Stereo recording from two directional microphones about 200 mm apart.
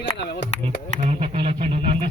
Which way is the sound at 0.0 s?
60° left (ahead or behind).